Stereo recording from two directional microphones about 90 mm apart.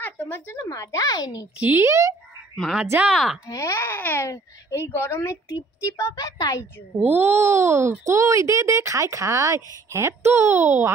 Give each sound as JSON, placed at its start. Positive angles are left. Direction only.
{"t": 0.0, "sound": "speech", "side_deg": 25}
{"t": 0.7, "sound": "a woman's voice", "side_deg": 40}
{"t": 1.6, "sound": "speech", "side_deg": -25}
{"t": 2.5, "sound": "a woman's voice", "side_deg": 5}
{"t": 3.5, "sound": "a woman's voice", "side_deg": 30}
{"t": 7.0, "sound": "speech", "side_deg": -25}